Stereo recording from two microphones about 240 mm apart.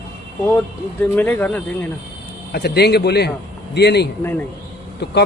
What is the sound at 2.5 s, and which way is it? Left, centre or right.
Speech, left.